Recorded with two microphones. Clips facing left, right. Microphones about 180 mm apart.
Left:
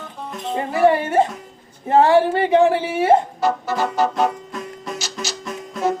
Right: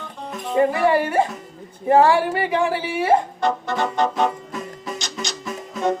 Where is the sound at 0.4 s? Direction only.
25° left (ahead or behind).